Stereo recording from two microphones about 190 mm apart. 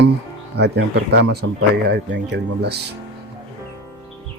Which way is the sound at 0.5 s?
60° right (ahead or behind).